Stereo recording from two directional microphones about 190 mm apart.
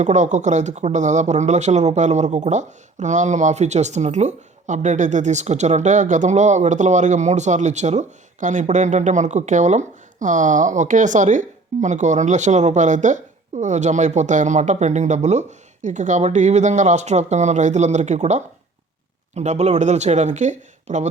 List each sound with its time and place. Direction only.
0.0 s speech: 40° right (ahead or behind)